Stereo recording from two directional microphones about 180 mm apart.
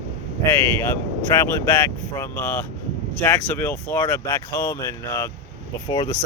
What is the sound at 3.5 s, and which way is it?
Speech, 10° left (ahead or behind).